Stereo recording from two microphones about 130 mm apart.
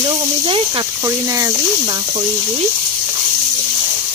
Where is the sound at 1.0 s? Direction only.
25° right (ahead or behind).